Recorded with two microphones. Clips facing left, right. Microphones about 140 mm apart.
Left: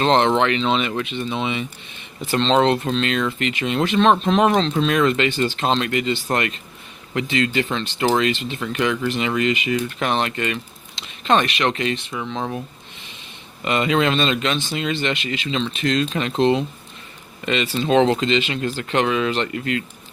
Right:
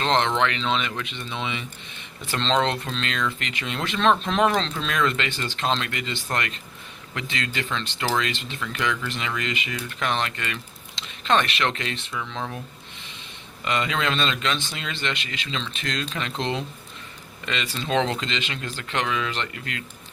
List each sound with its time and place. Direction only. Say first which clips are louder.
0.0 s speech: left 5 dB; 20° left (ahead or behind)
13.7 s speech: left 6 dB; 20° left (ahead or behind)
18.6 s speech: left 8 dB; 35° left (ahead or behind)